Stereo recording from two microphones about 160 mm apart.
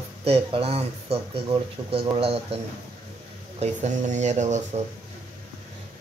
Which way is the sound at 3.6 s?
45° right (ahead or behind).